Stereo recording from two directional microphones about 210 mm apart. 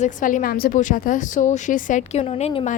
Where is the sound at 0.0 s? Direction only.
40° left (ahead or behind).